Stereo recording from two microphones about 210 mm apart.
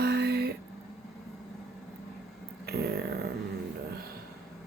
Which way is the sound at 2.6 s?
50° right (ahead or behind).